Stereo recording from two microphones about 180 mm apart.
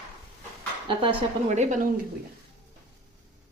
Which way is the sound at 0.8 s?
30° right (ahead or behind).